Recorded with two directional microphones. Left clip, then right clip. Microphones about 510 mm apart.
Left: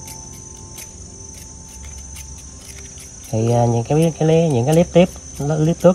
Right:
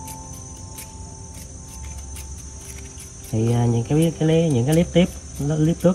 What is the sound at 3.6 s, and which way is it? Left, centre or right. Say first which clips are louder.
Speech: left 6 dB; centre.